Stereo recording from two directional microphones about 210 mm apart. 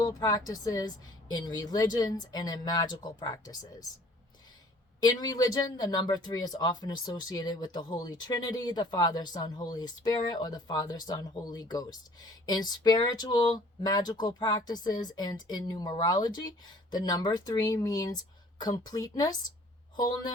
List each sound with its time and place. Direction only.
0.0 s a woman's voice: 15° left (ahead or behind)
4.9 s a woman's voice: 20° left (ahead or behind)